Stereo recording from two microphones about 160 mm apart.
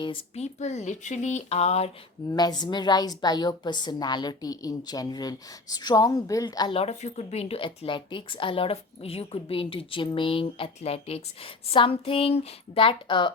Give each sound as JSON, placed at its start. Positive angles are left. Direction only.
{"t": 0.0, "sound": "a woman's voice", "side_deg": 30}
{"t": 0.6, "sound": "speech", "side_deg": 45}
{"t": 2.3, "sound": "a woman's voice", "side_deg": 25}
{"t": 6.7, "sound": "a woman's voice", "side_deg": 45}